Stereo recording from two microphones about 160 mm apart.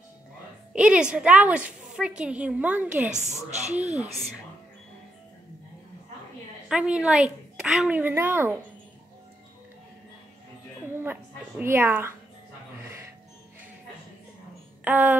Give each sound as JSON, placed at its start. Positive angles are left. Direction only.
{"t": 0.7, "sound": "a woman's voice", "side_deg": -5}
{"t": 3.1, "sound": "a woman's voice", "side_deg": -45}
{"t": 6.7, "sound": "a woman's voice", "side_deg": -5}
{"t": 11.0, "sound": "a woman's voice", "side_deg": -15}
{"t": 14.9, "sound": "a woman's voice", "side_deg": -10}